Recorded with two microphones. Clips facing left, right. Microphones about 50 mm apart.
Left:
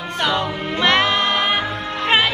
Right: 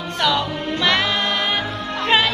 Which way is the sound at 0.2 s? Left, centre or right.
Left.